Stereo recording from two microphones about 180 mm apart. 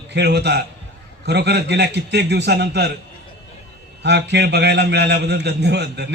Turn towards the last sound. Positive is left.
turn(degrees=-70)  # may be behind; listen again after turning